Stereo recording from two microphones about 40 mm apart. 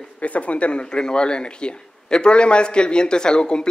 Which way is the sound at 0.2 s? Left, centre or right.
Left.